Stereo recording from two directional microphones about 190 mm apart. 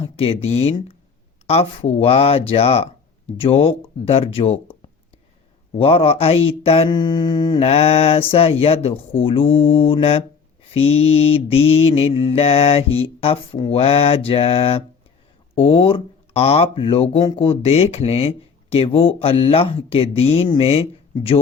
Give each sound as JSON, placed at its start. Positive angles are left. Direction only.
{"t": 0.0, "sound": "mantra", "side_deg": 30}
{"t": 1.5, "sound": "speech", "side_deg": 30}
{"t": 5.7, "sound": "mantra", "side_deg": 30}
{"t": 10.8, "sound": "speech", "side_deg": 30}